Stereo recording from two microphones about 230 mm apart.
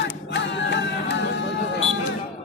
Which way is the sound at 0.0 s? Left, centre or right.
Left.